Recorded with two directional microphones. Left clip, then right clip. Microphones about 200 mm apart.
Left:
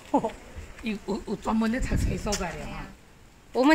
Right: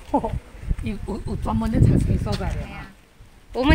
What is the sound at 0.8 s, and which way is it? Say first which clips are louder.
Speech: even; 55° right (ahead or behind).